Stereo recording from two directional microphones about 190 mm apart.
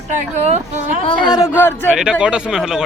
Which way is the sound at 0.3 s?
35° right (ahead or behind).